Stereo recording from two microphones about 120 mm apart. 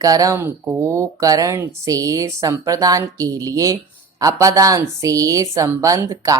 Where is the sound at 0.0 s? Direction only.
30° right (ahead or behind).